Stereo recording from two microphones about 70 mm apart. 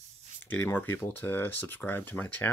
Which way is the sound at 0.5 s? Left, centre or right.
Left.